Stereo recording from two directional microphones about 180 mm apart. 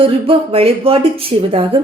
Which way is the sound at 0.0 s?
30° right (ahead or behind).